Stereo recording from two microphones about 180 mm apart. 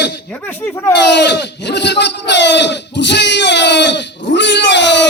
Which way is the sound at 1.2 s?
70° left (ahead or behind).